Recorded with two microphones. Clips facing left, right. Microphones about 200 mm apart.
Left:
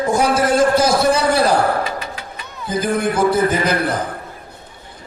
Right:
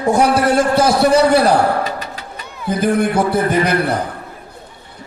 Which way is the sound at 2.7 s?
65° right (ahead or behind).